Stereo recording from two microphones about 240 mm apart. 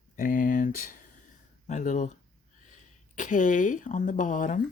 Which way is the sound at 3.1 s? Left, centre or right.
Left.